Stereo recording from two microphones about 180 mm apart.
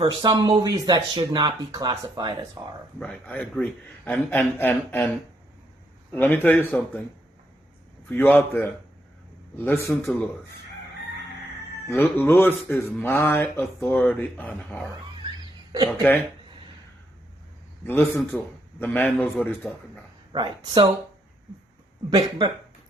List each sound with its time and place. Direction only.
0.0 s speech: 20° right (ahead or behind)
3.0 s speech: 5° left (ahead or behind)
8.1 s speech: 10° left (ahead or behind)
11.9 s speech: 15° left (ahead or behind)
15.7 s speech: 20° right (ahead or behind)
17.8 s speech: 10° left (ahead or behind)
20.3 s speech: 25° right (ahead or behind)
22.1 s speech: 25° right (ahead or behind)